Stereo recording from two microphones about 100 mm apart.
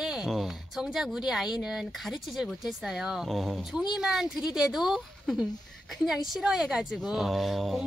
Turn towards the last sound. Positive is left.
turn(degrees=0)  # may be behind; listen again after turning